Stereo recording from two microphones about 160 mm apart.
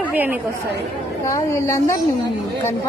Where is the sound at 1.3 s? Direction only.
20° left (ahead or behind).